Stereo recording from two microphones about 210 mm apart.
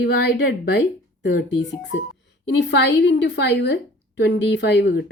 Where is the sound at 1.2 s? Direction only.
60° left (ahead or behind).